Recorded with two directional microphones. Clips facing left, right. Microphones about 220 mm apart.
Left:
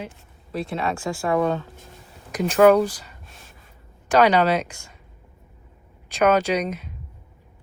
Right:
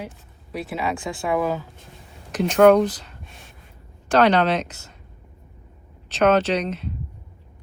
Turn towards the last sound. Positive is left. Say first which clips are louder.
# even
turn(degrees=10)  # may be behind; listen again after turning